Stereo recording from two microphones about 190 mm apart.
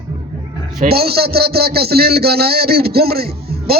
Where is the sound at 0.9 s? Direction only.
55° right (ahead or behind).